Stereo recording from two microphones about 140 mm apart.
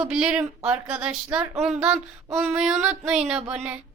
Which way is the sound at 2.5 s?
Centre (ahead or behind).